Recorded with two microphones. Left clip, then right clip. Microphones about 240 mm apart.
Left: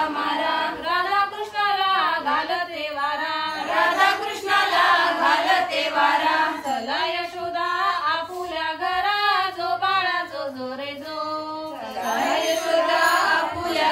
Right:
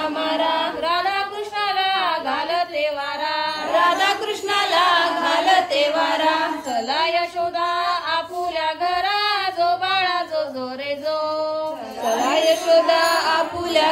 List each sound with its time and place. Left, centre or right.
3.7 s choir: centre
6.9 s a sound: right
12.2 s chant: centre